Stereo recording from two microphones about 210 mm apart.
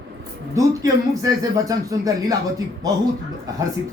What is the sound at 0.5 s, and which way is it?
A man's voice, 15° right (ahead or behind).